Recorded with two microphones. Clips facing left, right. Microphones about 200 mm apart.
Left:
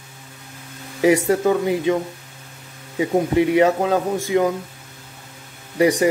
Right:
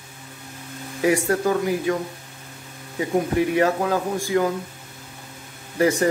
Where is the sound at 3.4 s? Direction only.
20° left (ahead or behind).